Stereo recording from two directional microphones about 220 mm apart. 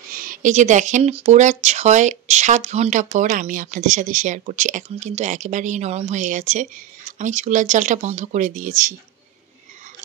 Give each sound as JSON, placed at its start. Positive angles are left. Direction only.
{"t": 0.1, "sound": "speech", "side_deg": -40}